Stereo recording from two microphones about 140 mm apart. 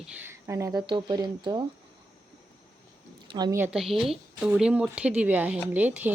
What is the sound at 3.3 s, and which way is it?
Speech, 30° right (ahead or behind).